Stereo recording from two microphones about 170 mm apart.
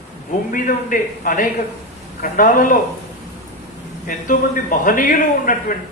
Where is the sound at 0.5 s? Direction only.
50° left (ahead or behind).